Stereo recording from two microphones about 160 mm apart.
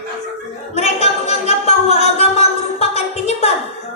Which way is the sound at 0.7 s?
40° left (ahead or behind).